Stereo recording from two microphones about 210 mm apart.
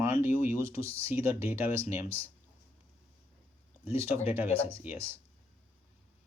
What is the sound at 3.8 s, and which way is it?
Speech, 10° right (ahead or behind).